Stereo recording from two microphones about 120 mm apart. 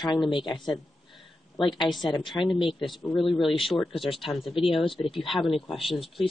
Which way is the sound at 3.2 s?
45° left (ahead or behind).